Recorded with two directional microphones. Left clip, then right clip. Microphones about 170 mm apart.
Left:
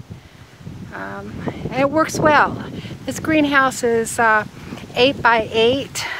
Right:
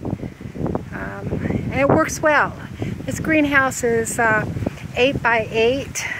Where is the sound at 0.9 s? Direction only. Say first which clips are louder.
Right 1 dB; 5° left (ahead or behind).